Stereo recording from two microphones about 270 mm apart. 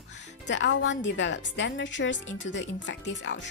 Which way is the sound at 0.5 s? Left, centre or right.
Left.